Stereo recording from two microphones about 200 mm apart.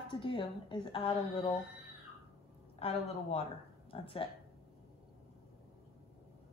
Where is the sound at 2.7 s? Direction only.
30° left (ahead or behind).